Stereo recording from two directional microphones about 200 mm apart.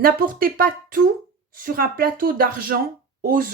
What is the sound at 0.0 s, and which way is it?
Speech, 45° right (ahead or behind).